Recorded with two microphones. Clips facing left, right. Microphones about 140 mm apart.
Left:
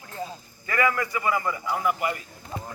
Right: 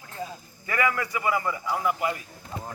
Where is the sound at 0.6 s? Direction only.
15° right (ahead or behind).